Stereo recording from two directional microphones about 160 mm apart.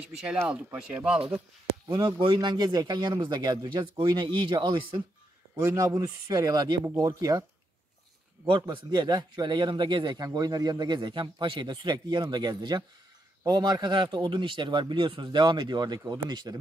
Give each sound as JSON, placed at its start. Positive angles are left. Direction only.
{"t": 0.2, "sound": "speech", "side_deg": -5}
{"t": 1.9, "sound": "a man's voice", "side_deg": -30}
{"t": 5.6, "sound": "a man's voice", "side_deg": -15}
{"t": 8.5, "sound": "a man's voice", "side_deg": -30}